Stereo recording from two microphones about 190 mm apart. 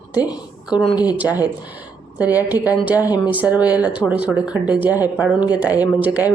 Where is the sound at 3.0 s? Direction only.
20° left (ahead or behind).